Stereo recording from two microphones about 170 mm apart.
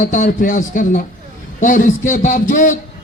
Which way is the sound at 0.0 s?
50° left (ahead or behind).